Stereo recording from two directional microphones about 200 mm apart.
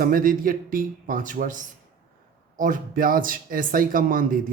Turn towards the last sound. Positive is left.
turn(degrees=-45)  # may be behind; listen again after turning